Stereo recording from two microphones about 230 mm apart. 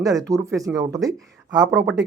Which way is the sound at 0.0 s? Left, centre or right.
Centre.